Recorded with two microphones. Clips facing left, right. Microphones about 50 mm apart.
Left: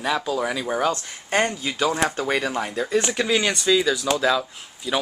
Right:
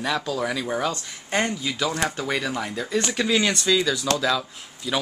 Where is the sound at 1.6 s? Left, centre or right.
Left.